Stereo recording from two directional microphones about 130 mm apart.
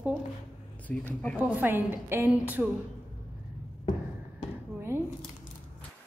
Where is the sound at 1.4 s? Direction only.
15° right (ahead or behind).